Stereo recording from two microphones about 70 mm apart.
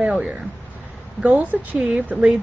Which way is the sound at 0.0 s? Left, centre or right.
Centre.